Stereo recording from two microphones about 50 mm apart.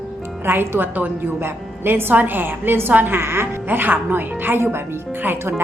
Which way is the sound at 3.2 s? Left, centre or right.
Right.